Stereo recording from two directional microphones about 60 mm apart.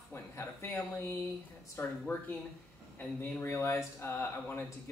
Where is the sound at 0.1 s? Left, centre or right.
Left.